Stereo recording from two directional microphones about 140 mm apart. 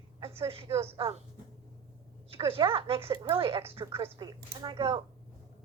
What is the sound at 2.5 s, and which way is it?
Speech, 40° right (ahead or behind).